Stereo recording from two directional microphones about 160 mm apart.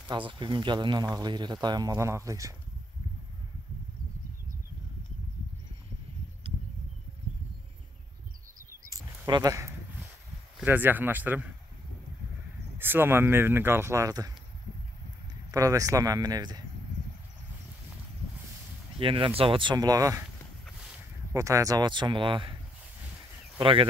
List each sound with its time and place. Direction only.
0.3 s speech: 30° right (ahead or behind)
8.8 s a sound: 20° right (ahead or behind)
10.6 s speech: 10° right (ahead or behind)
12.7 s speech: 15° right (ahead or behind)
15.5 s speech: 20° right (ahead or behind)
18.9 s speech: 35° right (ahead or behind)
21.3 s speech: 20° right (ahead or behind)
23.6 s speech: 35° right (ahead or behind)